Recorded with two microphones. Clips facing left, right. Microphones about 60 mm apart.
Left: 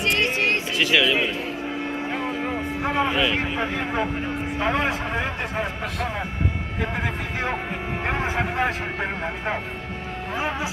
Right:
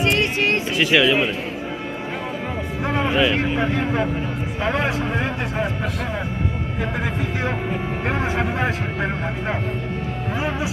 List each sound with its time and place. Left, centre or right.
0.0 s music: right
3.2 s speech: centre
8.1 s speech: centre